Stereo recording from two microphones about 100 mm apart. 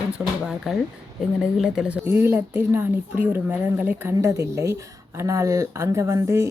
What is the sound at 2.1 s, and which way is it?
Speech, 25° right (ahead or behind).